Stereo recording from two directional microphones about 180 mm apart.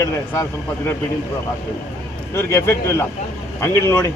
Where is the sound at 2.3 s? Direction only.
15° left (ahead or behind).